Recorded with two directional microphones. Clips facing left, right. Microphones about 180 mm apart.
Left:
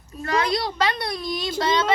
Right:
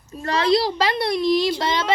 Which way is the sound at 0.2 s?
30° right (ahead or behind).